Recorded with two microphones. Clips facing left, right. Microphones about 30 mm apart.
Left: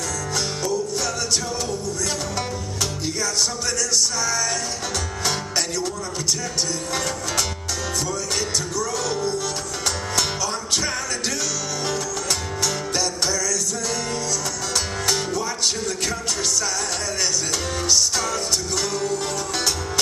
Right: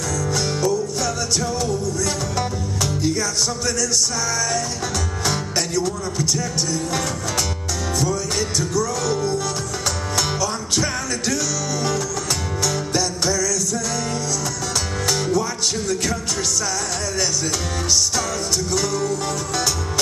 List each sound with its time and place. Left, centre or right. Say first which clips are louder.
0.3 s music: right 4 dB; centre
5.2 s music: right 1 dB; centre
8.0 s music: right 5 dB; centre
12.6 s music: right 2 dB; centre
15.0 s music: right 5 dB; centre
18.8 s music: right 2 dB; centre